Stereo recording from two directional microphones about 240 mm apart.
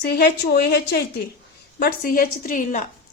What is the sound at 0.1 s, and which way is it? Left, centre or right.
A woman's voice, left.